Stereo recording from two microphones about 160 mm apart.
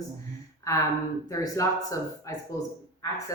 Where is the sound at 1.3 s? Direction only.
20° left (ahead or behind).